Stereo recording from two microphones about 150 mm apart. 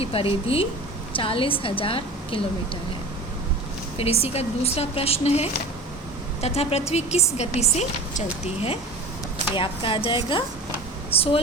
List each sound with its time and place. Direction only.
0.0 s a woman's voice: 40° left (ahead or behind)
3.9 s speech: 40° left (ahead or behind)
9.6 s a woman's voice: 35° left (ahead or behind)